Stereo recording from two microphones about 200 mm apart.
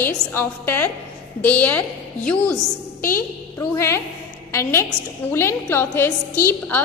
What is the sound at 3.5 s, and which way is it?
A woman's voice, 15° left (ahead or behind).